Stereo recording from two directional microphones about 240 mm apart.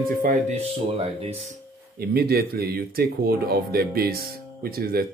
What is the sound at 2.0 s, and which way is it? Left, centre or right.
Speech, right.